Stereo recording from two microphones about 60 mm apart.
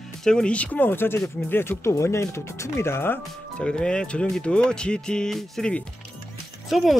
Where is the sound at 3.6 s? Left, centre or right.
Centre.